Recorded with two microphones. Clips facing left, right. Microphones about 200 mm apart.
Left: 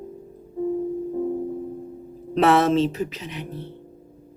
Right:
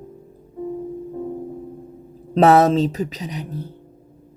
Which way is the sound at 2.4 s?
40° right (ahead or behind).